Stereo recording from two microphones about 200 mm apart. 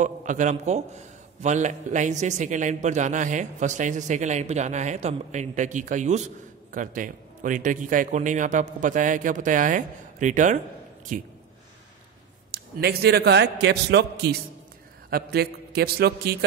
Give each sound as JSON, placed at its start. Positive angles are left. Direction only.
{"t": 0.0, "sound": "a man's voice", "side_deg": -40}
{"t": 12.4, "sound": "a man's voice", "side_deg": -50}
{"t": 15.0, "sound": "a man's voice", "side_deg": -50}